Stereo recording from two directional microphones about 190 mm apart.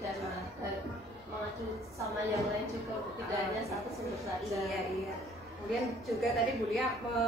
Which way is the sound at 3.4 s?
Centre (ahead or behind).